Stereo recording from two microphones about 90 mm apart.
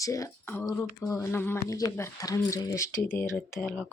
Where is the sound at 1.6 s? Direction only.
40° left (ahead or behind); by 3.6 s 25° left (ahead or behind).